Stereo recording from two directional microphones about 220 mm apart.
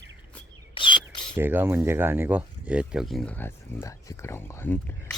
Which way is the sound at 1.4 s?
10° right (ahead or behind).